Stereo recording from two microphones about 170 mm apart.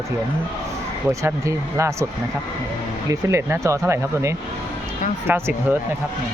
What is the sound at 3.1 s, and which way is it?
Speech, 15° right (ahead or behind).